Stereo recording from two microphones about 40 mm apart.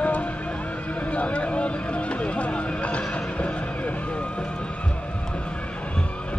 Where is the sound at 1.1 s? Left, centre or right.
Left.